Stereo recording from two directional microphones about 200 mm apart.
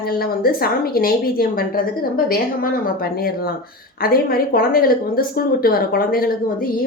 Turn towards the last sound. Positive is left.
turn(degrees=45)  # may be behind; listen again after turning